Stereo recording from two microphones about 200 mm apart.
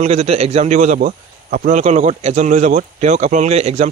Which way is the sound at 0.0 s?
30° right (ahead or behind).